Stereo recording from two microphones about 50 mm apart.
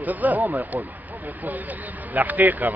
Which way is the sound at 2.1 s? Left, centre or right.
Right.